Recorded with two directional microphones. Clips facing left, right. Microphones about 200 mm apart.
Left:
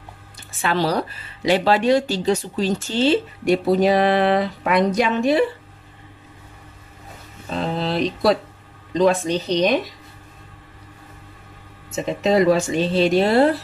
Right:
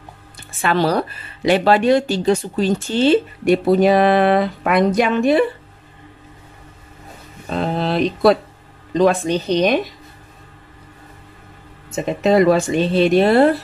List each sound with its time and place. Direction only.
0.6 s speech: 55° right (ahead or behind)
7.4 s a sound: 55° right (ahead or behind)
8.9 s speech: 55° right (ahead or behind)
11.9 s speech: 55° right (ahead or behind)